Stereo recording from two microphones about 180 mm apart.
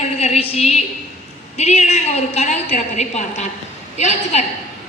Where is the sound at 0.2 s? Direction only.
35° left (ahead or behind).